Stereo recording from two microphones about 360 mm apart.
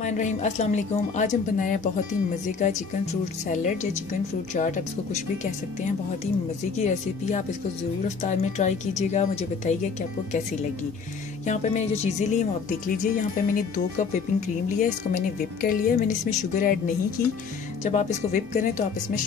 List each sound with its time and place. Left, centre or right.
0.0 s speech: centre
6.8 s speech: centre
11.4 s speech: centre